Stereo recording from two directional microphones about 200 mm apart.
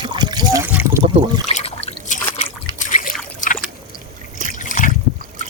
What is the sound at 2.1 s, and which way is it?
Trickle, 40° left (ahead or behind).